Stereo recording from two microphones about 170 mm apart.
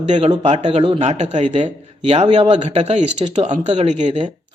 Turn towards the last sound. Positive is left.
turn(degrees=-40)  # may be behind; listen again after turning